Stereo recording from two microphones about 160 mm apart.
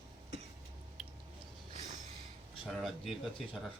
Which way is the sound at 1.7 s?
45° right (ahead or behind).